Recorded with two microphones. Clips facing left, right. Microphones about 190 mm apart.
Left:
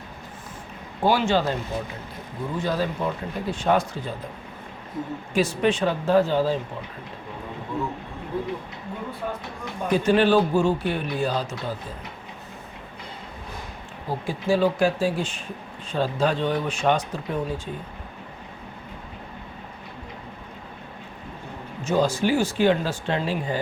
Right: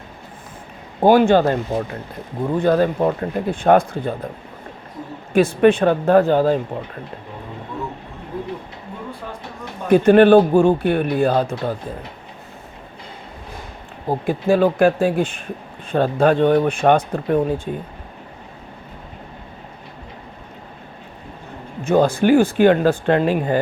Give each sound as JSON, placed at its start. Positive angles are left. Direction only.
{"t": 1.0, "sound": "a man's voice", "side_deg": -55}
{"t": 5.3, "sound": "a man's voice", "side_deg": -55}
{"t": 9.9, "sound": "a man's voice", "side_deg": -55}
{"t": 14.1, "sound": "a man's voice", "side_deg": -60}
{"t": 21.8, "sound": "a man's voice", "side_deg": -55}